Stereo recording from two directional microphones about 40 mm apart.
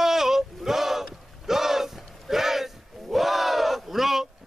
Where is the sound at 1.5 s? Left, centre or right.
Centre.